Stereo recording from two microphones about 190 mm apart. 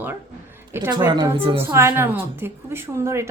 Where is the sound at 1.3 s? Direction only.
30° right (ahead or behind).